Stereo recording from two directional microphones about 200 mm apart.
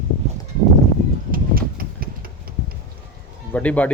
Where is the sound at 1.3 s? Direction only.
45° right (ahead or behind).